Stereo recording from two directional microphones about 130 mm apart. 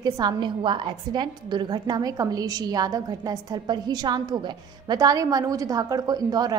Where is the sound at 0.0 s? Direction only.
30° right (ahead or behind).